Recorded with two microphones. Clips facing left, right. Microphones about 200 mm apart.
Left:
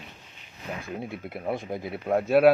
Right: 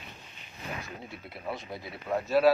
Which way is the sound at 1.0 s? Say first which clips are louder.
Left 8 dB; 55° left (ahead or behind).